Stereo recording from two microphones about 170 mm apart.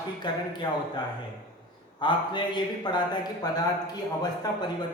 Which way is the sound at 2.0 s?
30° left (ahead or behind).